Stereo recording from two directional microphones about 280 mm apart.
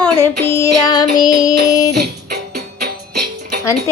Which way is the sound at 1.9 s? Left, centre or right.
Right.